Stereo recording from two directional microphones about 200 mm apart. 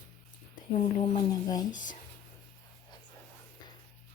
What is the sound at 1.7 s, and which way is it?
Speech, 40° left (ahead or behind).